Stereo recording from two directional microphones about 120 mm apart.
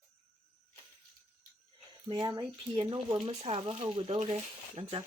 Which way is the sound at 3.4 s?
60° right (ahead or behind).